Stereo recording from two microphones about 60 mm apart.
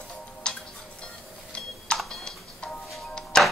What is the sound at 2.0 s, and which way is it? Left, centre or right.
Music, centre.